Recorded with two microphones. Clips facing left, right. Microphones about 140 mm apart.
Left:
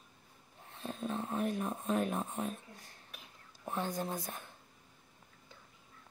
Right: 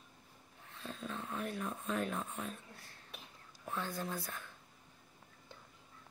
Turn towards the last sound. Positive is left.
turn(degrees=20)  # may be behind; listen again after turning